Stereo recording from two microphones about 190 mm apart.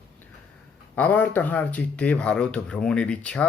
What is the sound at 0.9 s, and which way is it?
Speech, 10° left (ahead or behind).